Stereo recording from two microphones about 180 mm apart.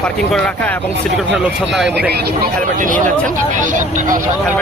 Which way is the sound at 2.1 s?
60° right (ahead or behind).